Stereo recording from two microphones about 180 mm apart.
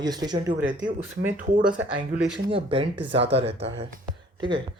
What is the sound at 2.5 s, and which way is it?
Speech, 30° right (ahead or behind).